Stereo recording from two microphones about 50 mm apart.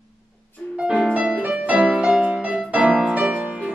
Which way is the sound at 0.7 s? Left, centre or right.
Centre.